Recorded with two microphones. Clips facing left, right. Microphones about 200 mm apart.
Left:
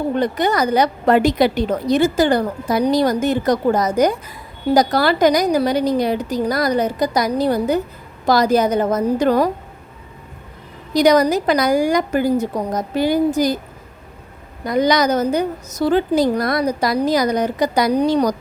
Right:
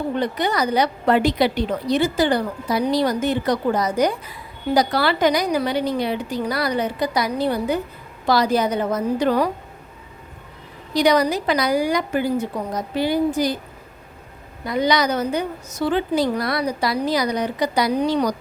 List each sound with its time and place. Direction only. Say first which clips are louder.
0.2 s a woman's voice: left 4 dB; 45° left (ahead or behind)
10.9 s a woman's voice: left 4 dB; 45° left (ahead or behind)
14.6 s a woman's voice: left 4 dB; 45° left (ahead or behind)